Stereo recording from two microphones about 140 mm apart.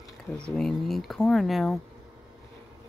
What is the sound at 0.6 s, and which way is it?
Speech, centre (ahead or behind).